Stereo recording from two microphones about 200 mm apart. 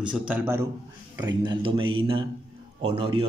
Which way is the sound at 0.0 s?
5° right (ahead or behind).